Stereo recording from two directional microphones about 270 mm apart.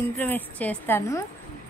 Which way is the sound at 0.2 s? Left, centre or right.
Centre.